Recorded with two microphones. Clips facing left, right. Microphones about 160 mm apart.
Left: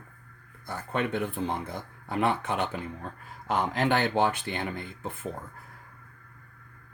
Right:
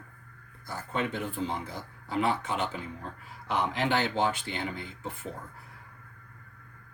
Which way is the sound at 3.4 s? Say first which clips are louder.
Left 2 dB; 45° left (ahead or behind).